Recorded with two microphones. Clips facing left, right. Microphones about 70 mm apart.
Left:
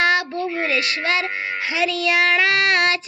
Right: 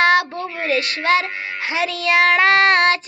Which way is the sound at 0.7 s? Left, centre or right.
Right.